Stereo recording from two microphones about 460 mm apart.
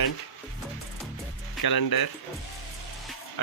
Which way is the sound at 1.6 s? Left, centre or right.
Left.